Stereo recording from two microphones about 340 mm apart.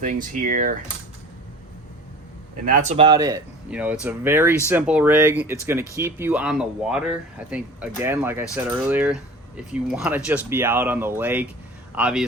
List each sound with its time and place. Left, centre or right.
0.0 s speech: right
2.6 s speech: right; by 12.2 s centre